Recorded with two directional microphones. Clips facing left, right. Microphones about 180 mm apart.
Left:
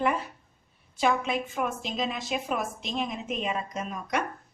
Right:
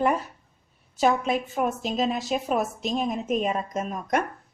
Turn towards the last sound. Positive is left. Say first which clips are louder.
# right 5 dB
turn(degrees=-45)  # may be behind; listen again after turning